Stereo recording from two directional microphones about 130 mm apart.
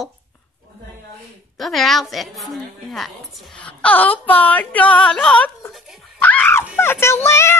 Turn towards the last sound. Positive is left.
turn(degrees=20)  # may be behind; listen again after turning